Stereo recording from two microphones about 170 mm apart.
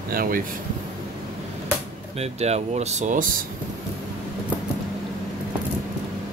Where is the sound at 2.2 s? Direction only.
40° right (ahead or behind).